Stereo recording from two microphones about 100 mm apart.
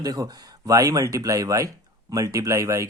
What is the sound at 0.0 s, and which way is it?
Speech, 40° right (ahead or behind).